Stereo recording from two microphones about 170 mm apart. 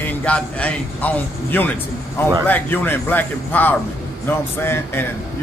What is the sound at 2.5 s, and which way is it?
A man's voice, 10° left (ahead or behind).